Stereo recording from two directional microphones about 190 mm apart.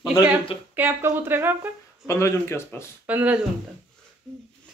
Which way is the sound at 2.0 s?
15° left (ahead or behind).